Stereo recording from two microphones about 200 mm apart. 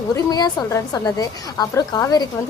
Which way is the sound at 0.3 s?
20° left (ahead or behind).